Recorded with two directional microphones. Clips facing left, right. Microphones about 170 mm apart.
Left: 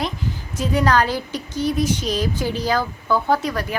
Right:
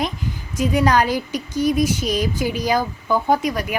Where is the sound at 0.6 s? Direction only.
15° right (ahead or behind).